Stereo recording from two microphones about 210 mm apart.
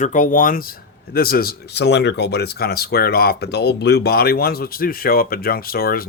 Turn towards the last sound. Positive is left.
turn(degrees=45)  # may be behind; listen again after turning